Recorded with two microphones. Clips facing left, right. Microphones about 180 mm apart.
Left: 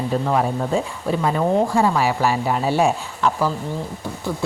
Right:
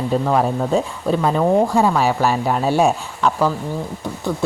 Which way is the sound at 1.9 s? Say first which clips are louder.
Right 2 dB; 10° left (ahead or behind).